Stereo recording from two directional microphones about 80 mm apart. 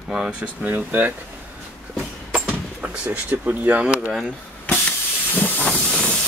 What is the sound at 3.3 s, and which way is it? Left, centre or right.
Speech, right.